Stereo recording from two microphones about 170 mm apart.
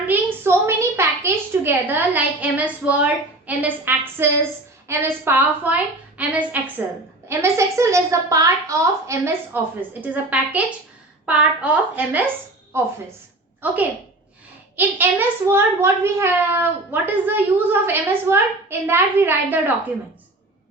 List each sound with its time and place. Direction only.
0.1 s a child's voice: 15° right (ahead or behind)
13.6 s a child's voice: 10° right (ahead or behind)